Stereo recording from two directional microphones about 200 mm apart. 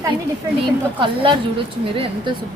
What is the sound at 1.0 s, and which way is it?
A woman's voice, 25° right (ahead or behind).